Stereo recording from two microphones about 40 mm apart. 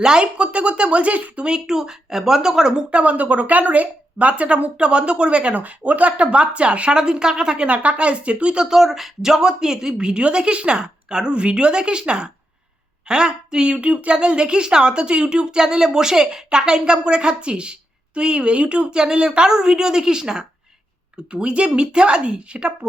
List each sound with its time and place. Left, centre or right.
0.0 s speech: right
1.5 s speech: centre
2.9 s speech: right
5.5 s speech: right; by 7.7 s centre
7.7 s speech: right
8.6 s speech: centre
21.2 s speech: right